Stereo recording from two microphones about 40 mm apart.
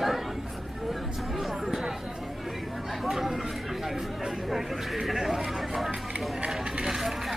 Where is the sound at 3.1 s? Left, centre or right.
Centre.